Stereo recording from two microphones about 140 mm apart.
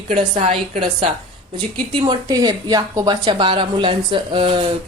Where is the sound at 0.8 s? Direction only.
40° right (ahead or behind).